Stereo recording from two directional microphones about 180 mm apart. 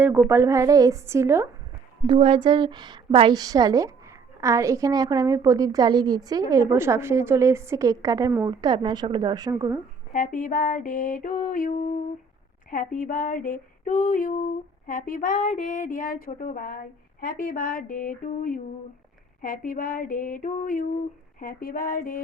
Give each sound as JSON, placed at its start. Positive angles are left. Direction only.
{"t": 0.3, "sound": "a woman's voice", "side_deg": -15}
{"t": 2.0, "sound": "a woman's voice", "side_deg": -30}
{"t": 10.1, "sound": "female singing", "side_deg": 45}